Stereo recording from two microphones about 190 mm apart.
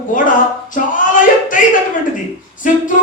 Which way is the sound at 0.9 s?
45° left (ahead or behind).